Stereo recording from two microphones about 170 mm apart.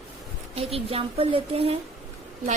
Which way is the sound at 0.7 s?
35° right (ahead or behind).